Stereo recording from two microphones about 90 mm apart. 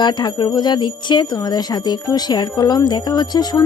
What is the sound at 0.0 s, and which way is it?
Speech, 55° left (ahead or behind).